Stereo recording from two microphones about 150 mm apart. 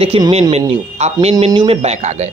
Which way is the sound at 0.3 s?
45° right (ahead or behind).